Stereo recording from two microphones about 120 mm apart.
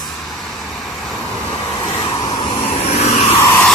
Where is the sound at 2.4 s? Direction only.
50° left (ahead or behind).